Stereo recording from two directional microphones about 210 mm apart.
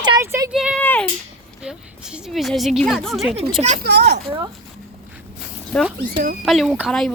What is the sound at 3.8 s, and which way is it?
Speech, 55° right (ahead or behind).